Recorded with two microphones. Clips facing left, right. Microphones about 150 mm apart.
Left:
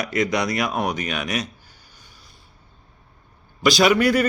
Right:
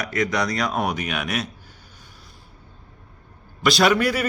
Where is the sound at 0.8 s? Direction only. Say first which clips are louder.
Even; 5° right (ahead or behind).